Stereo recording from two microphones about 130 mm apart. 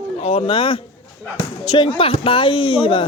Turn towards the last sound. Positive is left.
turn(degrees=40)  # may be behind; listen again after turning